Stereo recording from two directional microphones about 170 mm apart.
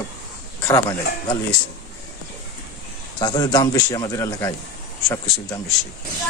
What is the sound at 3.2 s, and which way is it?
A man's voice, 25° left (ahead or behind).